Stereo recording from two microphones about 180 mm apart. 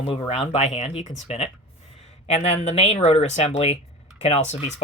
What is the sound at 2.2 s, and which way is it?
Speech, 35° left (ahead or behind).